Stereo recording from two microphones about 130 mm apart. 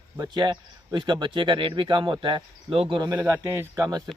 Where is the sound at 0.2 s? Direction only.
35° right (ahead or behind).